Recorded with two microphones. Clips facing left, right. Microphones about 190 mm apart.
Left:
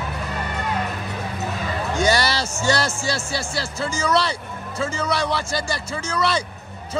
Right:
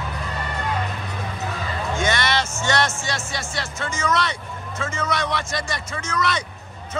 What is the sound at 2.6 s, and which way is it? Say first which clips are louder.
A man's voice: left 5 dB; 30° left (ahead or behind).